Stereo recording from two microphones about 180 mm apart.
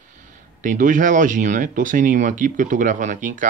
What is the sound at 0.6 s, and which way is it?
Speech, 45° right (ahead or behind).